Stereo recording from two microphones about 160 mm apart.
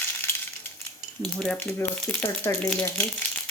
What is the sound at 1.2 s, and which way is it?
Speech, centre (ahead or behind).